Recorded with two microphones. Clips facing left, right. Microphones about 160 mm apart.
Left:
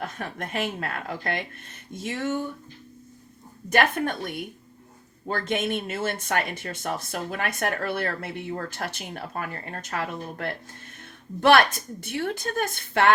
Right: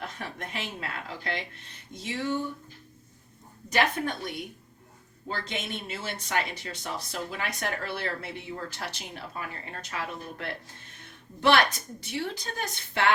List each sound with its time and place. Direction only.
0.0 s speech: 50° left (ahead or behind)
3.7 s speech: 55° left (ahead or behind)
5.3 s speech: 55° left (ahead or behind)